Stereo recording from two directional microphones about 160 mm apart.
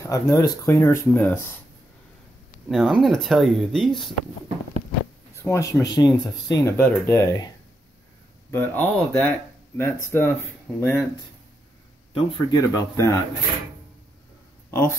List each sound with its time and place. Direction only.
0.0 s speech: 20° left (ahead or behind)
2.7 s speech: 5° right (ahead or behind)
5.4 s speech: 20° left (ahead or behind)
6.8 s speech: 15° left (ahead or behind)
8.5 s speech: 15° left (ahead or behind)
12.1 s speech: 30° left (ahead or behind)
14.7 s speech: 15° left (ahead or behind)